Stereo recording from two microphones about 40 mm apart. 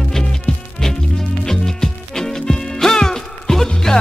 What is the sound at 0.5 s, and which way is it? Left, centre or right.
Music, left.